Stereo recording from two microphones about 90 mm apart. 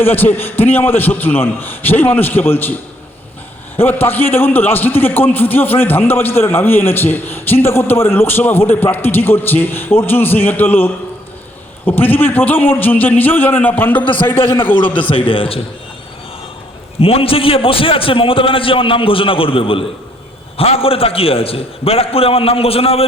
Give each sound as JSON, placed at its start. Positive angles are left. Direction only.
{"t": 0.0, "sound": "a man's voice", "side_deg": 20}
{"t": 3.8, "sound": "a man's voice", "side_deg": 25}
{"t": 14.8, "sound": "a man's voice", "side_deg": 70}
{"t": 15.3, "sound": "a man's voice", "side_deg": 85}
{"t": 17.0, "sound": "a man's voice", "side_deg": 90}